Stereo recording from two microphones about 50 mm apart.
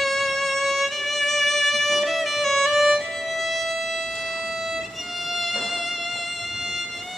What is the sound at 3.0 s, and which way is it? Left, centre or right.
Violin, centre.